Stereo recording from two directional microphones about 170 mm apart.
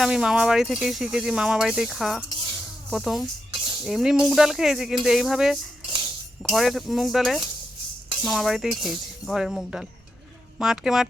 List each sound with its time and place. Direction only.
0.0 s speech: 5° right (ahead or behind)
3.5 s a sound: 30° right (ahead or behind)
3.8 s speech: 5° right (ahead or behind)